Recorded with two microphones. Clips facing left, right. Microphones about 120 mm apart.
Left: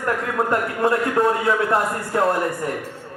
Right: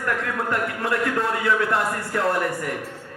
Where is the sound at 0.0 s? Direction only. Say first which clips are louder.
Left 3 dB; 25° left (ahead or behind).